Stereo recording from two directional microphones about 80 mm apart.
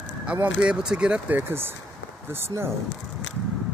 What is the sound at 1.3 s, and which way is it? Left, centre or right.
Speech, right.